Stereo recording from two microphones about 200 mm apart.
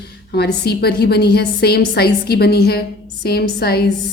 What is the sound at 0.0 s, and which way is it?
A woman's voice, 55° left (ahead or behind).